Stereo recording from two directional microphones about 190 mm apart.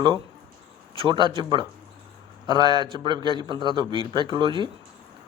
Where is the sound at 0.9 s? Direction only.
25° right (ahead or behind).